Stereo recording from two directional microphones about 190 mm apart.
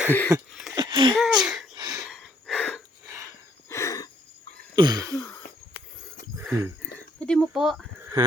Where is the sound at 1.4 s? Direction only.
Centre (ahead or behind).